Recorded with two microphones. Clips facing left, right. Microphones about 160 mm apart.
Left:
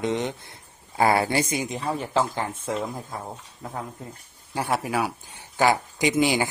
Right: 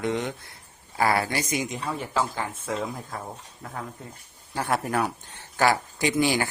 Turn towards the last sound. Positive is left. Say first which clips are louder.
# left 2 dB
turn(degrees=20)  # may be behind; listen again after turning